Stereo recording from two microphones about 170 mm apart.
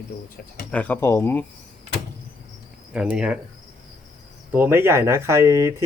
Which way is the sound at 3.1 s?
5° right (ahead or behind).